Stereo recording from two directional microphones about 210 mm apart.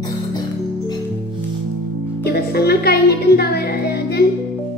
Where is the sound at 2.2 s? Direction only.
50° left (ahead or behind).